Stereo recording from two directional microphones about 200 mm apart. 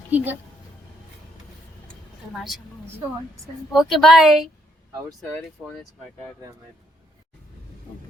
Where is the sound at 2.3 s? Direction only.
Centre (ahead or behind).